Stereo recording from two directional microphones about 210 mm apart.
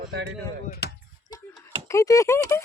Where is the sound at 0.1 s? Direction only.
55° right (ahead or behind).